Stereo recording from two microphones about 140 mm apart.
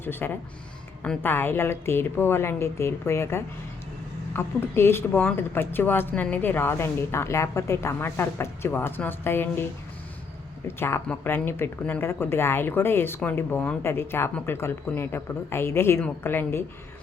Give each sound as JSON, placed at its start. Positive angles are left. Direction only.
{"t": 0.0, "sound": "a woman's voice", "side_deg": 15}
{"t": 10.8, "sound": "a woman's voice", "side_deg": 15}